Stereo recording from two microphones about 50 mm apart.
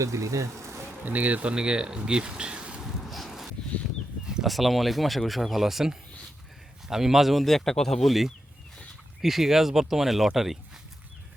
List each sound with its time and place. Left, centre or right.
0.0 s bee: right
1.0 s speech: right
2.8 s wind: centre
4.4 s speech: centre